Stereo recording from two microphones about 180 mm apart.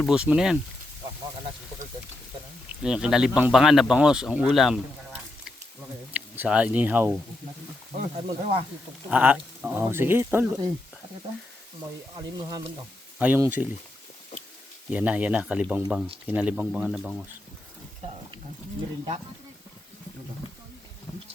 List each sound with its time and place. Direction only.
0.0 s speech: 5° right (ahead or behind)
2.8 s speech: 5° right (ahead or behind)
8.1 s speech: 25° right (ahead or behind)
9.0 s speech: 10° right (ahead or behind)
12.1 s speech: 20° right (ahead or behind)
13.1 s speech: 10° right (ahead or behind)
14.8 s speech: 10° right (ahead or behind)